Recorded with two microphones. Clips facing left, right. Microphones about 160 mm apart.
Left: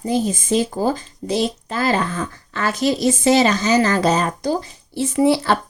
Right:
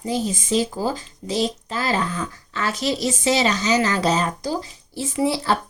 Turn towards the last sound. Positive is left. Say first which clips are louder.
# left 5 dB
turn(degrees=60)  # may be behind; listen again after turning